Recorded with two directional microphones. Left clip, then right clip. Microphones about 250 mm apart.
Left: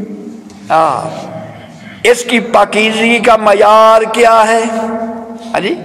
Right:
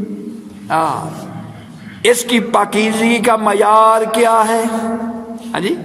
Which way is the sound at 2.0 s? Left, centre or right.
Right.